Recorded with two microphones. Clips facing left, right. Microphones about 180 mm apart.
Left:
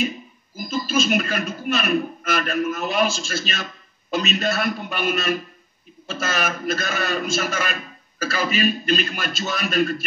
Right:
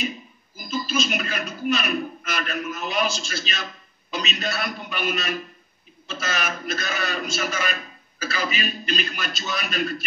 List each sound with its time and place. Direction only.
0.6 s a man's voice: 50° left (ahead or behind)